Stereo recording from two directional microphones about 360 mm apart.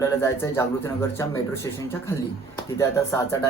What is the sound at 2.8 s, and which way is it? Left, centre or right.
Speech, centre.